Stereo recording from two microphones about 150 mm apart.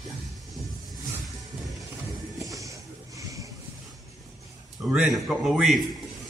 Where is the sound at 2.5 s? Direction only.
20° right (ahead or behind).